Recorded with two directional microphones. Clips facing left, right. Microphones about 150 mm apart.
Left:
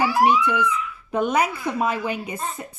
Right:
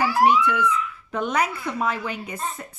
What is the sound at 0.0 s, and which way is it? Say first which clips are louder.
Speech: even; 15° left (ahead or behind).